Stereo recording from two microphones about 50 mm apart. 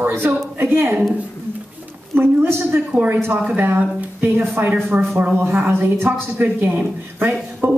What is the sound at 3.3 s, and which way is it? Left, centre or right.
Speech, right.